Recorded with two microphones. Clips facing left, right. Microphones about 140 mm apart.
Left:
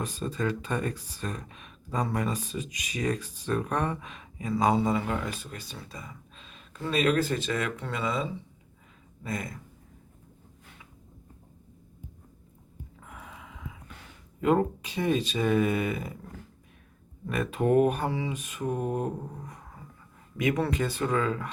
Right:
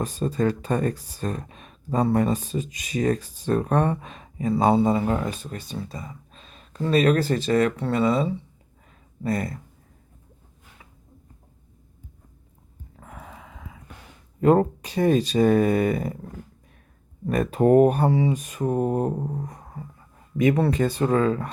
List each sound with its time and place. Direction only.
0.0 s speech: 35° right (ahead or behind)
13.0 s a sound: 40° right (ahead or behind)
14.4 s speech: 45° right (ahead or behind)
17.2 s speech: 40° right (ahead or behind)